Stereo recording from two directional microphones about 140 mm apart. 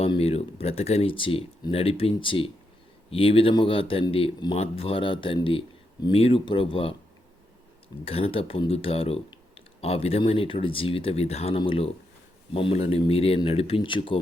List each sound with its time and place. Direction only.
0.1 s speech: 45° left (ahead or behind)
8.0 s speech: 40° left (ahead or behind)